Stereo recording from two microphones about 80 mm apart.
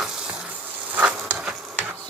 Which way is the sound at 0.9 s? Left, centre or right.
Right.